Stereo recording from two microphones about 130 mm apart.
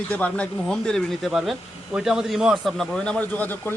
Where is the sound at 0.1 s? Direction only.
10° left (ahead or behind).